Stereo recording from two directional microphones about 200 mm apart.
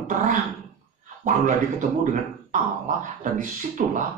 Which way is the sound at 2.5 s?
45° right (ahead or behind).